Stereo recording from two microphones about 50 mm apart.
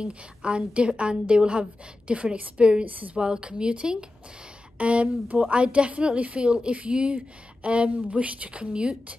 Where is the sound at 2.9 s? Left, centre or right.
Right.